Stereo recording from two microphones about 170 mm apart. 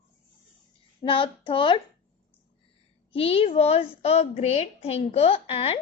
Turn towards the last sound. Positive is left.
turn(degrees=35)  # may be behind; listen again after turning